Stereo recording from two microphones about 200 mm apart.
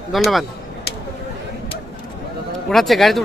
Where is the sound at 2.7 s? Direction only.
Centre (ahead or behind).